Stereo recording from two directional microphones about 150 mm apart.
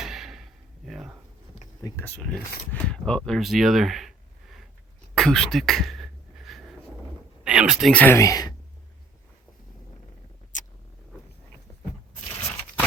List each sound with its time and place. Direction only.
0.0 s a sound: 5° right (ahead or behind)
1.8 s speech: 15° left (ahead or behind)
5.1 s beatboxing: 5° left (ahead or behind)
7.4 s speech: 5° right (ahead or behind)
7.9 s speech: 15° left (ahead or behind)
10.5 s a sound: 55° left (ahead or behind)